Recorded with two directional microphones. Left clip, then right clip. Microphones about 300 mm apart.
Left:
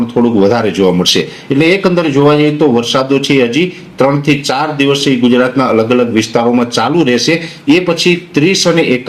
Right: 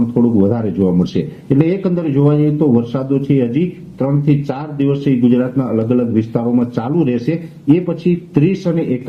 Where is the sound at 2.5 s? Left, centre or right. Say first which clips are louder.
Left 5 dB; left.